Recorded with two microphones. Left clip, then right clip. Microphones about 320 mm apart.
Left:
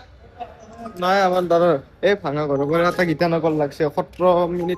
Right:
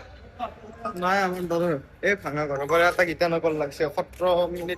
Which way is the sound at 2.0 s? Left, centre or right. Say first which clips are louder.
Left 5 dB; left.